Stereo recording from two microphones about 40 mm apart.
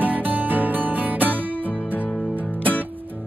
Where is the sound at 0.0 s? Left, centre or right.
Right.